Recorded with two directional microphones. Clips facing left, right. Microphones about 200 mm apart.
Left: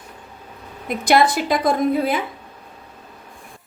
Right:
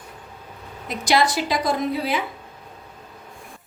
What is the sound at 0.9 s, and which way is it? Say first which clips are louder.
A woman's voice: left 4 dB; 55° left (ahead or behind).